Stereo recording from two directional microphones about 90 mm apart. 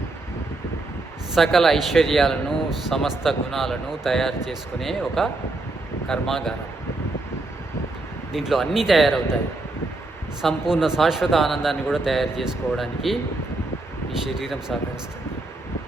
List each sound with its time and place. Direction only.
1.4 s speech: centre (ahead or behind)
8.3 s speech: 5° right (ahead or behind)
10.4 s speech: 5° right (ahead or behind)
14.3 s speech: 5° right (ahead or behind)